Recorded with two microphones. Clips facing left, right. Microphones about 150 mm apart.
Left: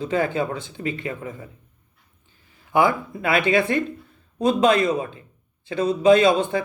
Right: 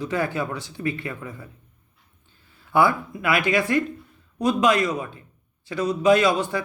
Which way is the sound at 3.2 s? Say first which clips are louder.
Left 3 dB; 25° left (ahead or behind).